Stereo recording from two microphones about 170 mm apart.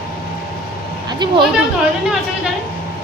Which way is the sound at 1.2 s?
25° right (ahead or behind).